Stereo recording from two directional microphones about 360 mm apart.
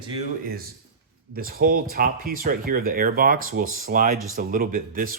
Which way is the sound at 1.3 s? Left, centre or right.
Right.